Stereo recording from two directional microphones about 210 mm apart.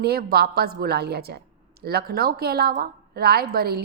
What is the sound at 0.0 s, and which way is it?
A woman's voice, 45° right (ahead or behind).